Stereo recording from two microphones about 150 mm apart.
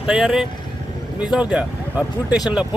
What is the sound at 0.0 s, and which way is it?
Speech, 5° right (ahead or behind).